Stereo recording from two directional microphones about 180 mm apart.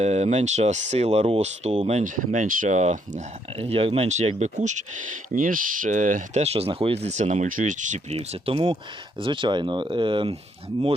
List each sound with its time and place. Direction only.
0.0 s speech: 40° right (ahead or behind)